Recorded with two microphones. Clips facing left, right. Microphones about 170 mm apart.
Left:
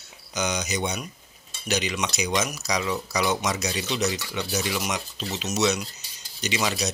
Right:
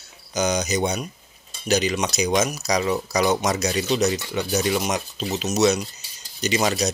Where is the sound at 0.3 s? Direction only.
40° right (ahead or behind).